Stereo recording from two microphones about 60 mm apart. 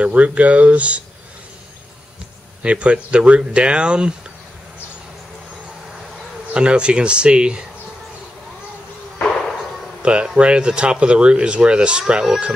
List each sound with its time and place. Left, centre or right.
0.0 s speech: right
2.6 s speech: centre
6.5 s speech: centre
10.0 s speech: centre